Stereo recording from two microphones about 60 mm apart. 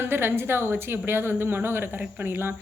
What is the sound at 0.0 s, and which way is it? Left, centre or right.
Speech, right.